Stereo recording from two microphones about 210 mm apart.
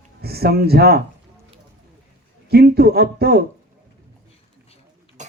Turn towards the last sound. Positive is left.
turn(degrees=-35)  # may be behind; listen again after turning